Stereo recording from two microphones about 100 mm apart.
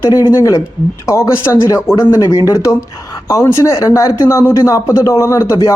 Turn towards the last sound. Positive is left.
turn(degrees=35)  # may be behind; listen again after turning